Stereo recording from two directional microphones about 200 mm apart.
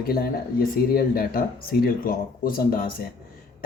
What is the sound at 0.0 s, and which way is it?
Speech, 50° left (ahead or behind).